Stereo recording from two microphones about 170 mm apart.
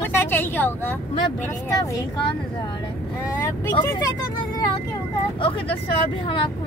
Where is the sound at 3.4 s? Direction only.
20° left (ahead or behind).